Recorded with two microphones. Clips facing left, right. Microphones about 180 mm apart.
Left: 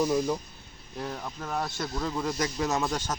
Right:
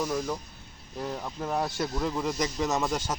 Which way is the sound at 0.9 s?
5° right (ahead or behind).